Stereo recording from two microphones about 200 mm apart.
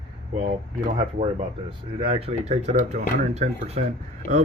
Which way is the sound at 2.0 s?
30° right (ahead or behind).